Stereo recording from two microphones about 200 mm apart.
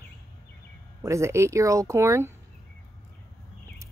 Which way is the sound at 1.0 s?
15° right (ahead or behind).